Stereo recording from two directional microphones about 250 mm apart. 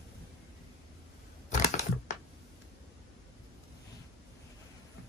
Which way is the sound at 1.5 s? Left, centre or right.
Left.